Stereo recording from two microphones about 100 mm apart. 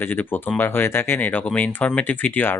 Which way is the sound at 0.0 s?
20° left (ahead or behind).